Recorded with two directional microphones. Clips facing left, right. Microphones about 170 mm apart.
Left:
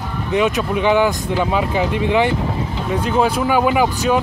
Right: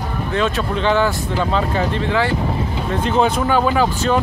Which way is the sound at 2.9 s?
5° left (ahead or behind).